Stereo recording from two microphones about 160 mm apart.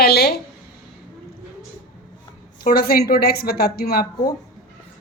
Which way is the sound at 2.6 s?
70° left (ahead or behind).